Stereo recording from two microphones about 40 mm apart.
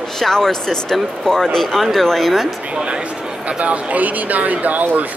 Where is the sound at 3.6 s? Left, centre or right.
Right.